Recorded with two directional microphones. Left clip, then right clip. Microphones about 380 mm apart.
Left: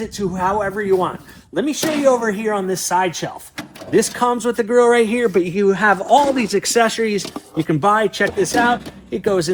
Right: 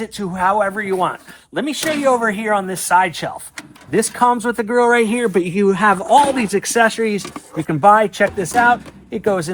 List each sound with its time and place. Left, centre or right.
0.0 s speech: centre